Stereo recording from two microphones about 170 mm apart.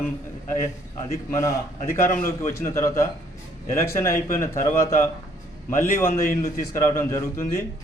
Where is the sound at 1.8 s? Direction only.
15° left (ahead or behind).